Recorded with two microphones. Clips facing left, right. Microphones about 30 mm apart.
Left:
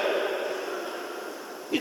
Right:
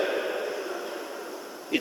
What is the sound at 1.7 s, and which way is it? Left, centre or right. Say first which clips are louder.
Bee: right 1 dB; centre.